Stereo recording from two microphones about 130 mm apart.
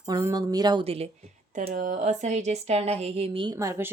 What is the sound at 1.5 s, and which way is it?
Speech, 90° right.